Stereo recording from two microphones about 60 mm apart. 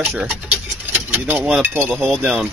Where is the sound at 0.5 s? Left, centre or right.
Right.